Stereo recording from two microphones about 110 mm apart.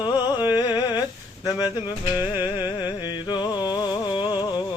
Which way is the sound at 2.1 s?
40° left (ahead or behind).